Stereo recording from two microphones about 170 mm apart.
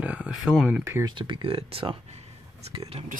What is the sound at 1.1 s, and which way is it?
Speech, 30° right (ahead or behind).